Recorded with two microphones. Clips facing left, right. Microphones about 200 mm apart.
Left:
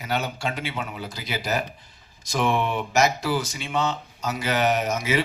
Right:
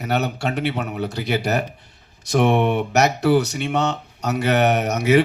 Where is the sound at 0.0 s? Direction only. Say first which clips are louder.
Right 5 dB; 65° right (ahead or behind).